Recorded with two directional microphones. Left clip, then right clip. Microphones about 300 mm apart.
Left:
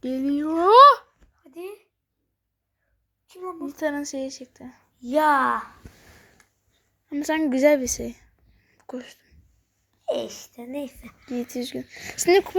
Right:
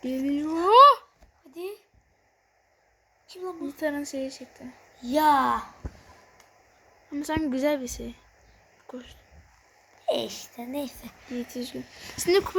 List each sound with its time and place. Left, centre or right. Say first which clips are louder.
0.0 s a sound: left 3 dB; centre
1.5 s a sound: even; centre
3.7 s speech: left 3 dB; centre
5.1 s speech: left 2 dB; centre
7.1 s speech: left 5 dB; centre
10.1 s a woman's voice: even; centre
10.5 s speech: even; centre
11.3 s speech: left 5 dB; centre